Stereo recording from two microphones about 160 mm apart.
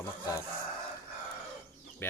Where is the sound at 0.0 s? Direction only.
15° left (ahead or behind).